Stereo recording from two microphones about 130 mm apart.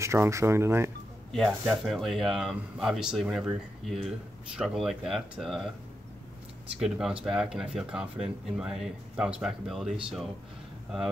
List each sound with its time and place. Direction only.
0.0 s speech: 20° right (ahead or behind)
1.3 s speech: centre (ahead or behind)
6.8 s speech: 5° right (ahead or behind)